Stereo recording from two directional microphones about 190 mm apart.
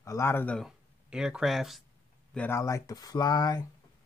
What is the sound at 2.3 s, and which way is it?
Speech, 10° left (ahead or behind).